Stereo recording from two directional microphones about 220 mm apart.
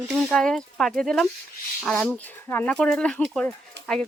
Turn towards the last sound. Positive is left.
turn(degrees=5)  # may be behind; listen again after turning